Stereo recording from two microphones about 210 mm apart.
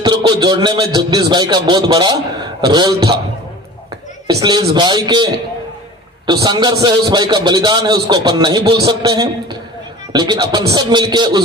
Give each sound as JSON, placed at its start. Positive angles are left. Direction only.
{"t": 0.0, "sound": "a man's voice", "side_deg": -20}
{"t": 4.3, "sound": "a man's voice", "side_deg": -20}